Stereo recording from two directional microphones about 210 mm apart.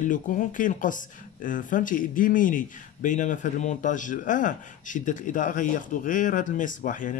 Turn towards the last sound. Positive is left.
turn(degrees=40)  # may be behind; listen again after turning